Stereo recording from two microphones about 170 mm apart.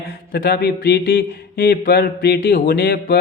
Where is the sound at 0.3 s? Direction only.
65° left (ahead or behind).